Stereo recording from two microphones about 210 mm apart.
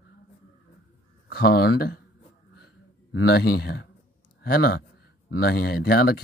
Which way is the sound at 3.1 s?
50° left (ahead or behind).